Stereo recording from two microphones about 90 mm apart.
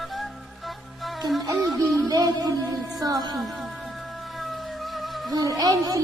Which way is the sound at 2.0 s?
40° right (ahead or behind).